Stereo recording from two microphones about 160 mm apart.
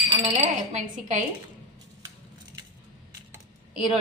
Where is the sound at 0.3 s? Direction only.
45° right (ahead or behind).